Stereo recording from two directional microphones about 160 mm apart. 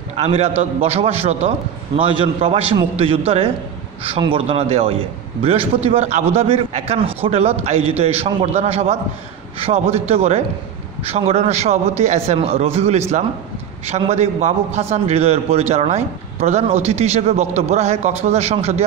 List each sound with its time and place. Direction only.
0.1 s a man's voice: 40° right (ahead or behind)